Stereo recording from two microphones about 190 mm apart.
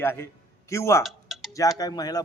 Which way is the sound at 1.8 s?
20° left (ahead or behind).